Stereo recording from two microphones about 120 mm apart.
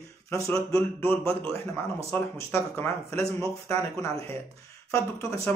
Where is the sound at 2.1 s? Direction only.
20° left (ahead or behind).